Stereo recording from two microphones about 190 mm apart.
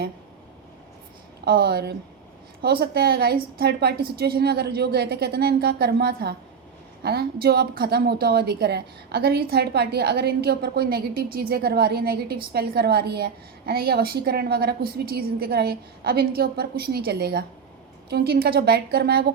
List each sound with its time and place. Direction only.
1.5 s a woman's voice: 55° right (ahead or behind)